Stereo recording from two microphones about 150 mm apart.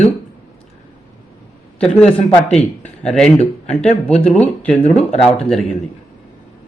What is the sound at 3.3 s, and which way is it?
Speech, 45° left (ahead or behind).